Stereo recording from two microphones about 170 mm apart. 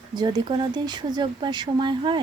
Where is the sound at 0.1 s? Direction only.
25° right (ahead or behind).